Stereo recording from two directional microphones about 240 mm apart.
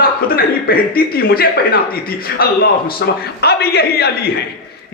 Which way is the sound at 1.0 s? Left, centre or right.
Left.